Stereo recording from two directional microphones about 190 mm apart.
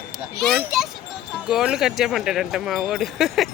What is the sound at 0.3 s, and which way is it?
A child's voice, centre (ahead or behind).